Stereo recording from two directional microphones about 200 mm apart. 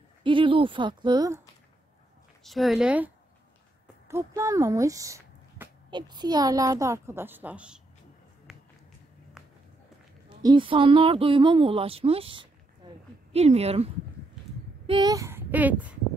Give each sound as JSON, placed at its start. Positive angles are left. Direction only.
{"t": 0.2, "sound": "speech", "side_deg": -25}
{"t": 2.4, "sound": "speech", "side_deg": 0}
{"t": 4.4, "sound": "speech", "side_deg": -15}
{"t": 8.5, "sound": "a sound", "side_deg": 0}
{"t": 10.4, "sound": "speech", "side_deg": -25}
{"t": 12.8, "sound": "a sound", "side_deg": -20}
{"t": 13.3, "sound": "a woman's voice", "side_deg": -30}
{"t": 14.9, "sound": "speech", "side_deg": -20}